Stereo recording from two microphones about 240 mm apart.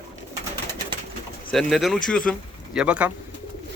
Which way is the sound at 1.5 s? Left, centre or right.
Centre.